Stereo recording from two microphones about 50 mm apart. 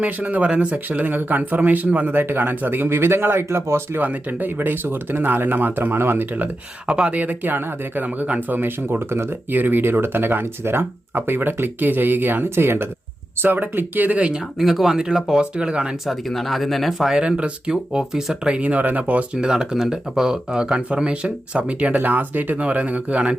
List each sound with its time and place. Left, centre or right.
0.0 s speech: right
4.0 s speech: right
6.8 s speech: centre
7.2 s speech: right
9.6 s speech: right
14.2 s speech: right
14.6 s speech: centre
16.0 s speech: centre
17.1 s speech: centre
19.3 s speech: centre